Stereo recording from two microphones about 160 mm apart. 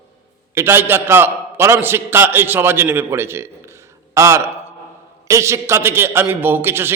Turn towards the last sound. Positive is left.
turn(degrees=-15)  # may be behind; listen again after turning